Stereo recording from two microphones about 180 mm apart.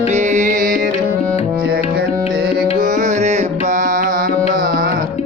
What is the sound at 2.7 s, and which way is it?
Music, 45° right (ahead or behind).